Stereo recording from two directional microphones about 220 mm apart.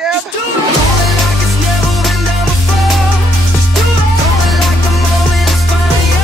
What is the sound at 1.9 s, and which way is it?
Music, centre (ahead or behind).